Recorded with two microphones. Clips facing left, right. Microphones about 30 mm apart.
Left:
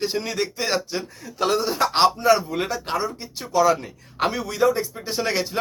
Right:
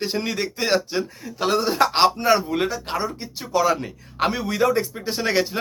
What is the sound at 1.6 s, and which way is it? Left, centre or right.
Speech, right.